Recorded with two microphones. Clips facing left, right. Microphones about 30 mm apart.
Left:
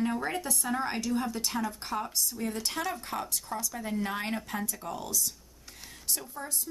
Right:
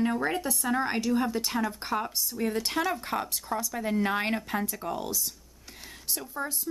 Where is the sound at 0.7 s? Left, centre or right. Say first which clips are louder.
Right 4 dB; centre.